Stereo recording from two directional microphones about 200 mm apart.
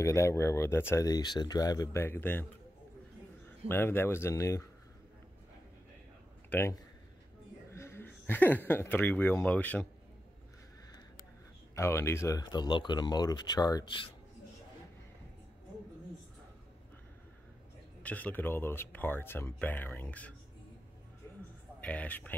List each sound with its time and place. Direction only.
0.0 s speech: 15° left (ahead or behind)
3.6 s speech: 10° left (ahead or behind)
6.5 s speech: 10° left (ahead or behind)
11.7 s speech: 15° left (ahead or behind)
18.0 s speech: 10° left (ahead or behind)
21.8 s speech: 5° left (ahead or behind)